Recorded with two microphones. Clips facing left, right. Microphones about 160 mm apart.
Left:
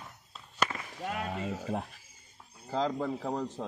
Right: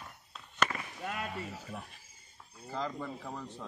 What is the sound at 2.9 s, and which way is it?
Speech, 40° left (ahead or behind).